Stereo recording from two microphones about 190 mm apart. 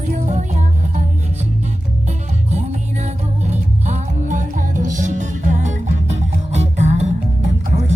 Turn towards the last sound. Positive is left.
turn(degrees=-35)  # may be behind; listen again after turning